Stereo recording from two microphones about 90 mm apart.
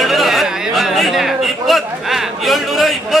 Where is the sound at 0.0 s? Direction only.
Centre (ahead or behind).